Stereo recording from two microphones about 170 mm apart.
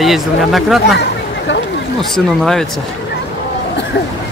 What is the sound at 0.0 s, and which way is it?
Speech, centre (ahead or behind).